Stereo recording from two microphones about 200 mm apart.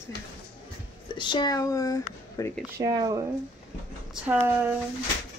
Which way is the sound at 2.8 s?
15° right (ahead or behind).